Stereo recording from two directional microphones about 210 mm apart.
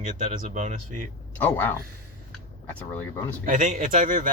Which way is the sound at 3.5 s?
35° right (ahead or behind).